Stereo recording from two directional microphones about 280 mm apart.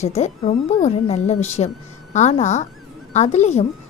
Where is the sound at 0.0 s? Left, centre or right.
Left.